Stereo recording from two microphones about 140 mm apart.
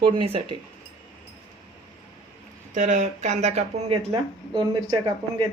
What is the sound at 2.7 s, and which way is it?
Speech, 60° right (ahead or behind).